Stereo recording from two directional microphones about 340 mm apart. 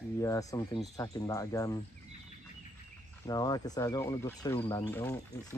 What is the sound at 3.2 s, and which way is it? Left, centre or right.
Speech, centre.